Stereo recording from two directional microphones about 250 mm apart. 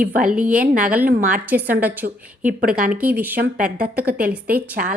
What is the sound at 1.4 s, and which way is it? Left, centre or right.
Speech, centre.